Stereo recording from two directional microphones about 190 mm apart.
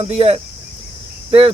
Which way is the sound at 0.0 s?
35° right (ahead or behind).